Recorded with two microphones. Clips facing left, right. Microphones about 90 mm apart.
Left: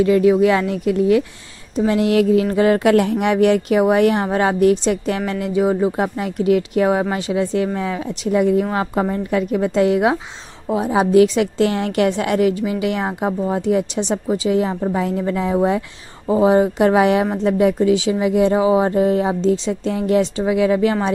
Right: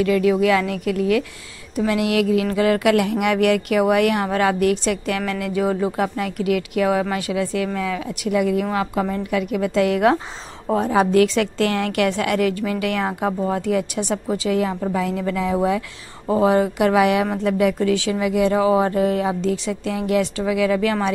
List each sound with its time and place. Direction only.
0.0 s a woman's voice: 25° left (ahead or behind)
16.3 s speech: 20° left (ahead or behind)